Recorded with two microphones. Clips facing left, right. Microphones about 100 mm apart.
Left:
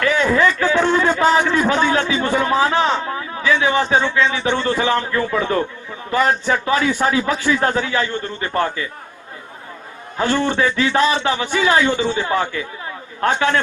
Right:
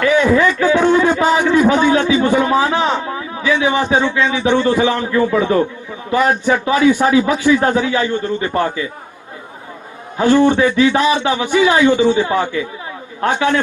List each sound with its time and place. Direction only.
0.1 s a man's voice: 15° right (ahead or behind)
10.2 s a man's voice: 15° right (ahead or behind)